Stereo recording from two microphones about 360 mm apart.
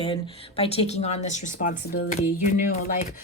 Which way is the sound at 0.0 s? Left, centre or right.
Centre.